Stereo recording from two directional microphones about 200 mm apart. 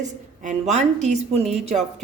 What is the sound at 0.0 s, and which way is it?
Speech, 35° right (ahead or behind).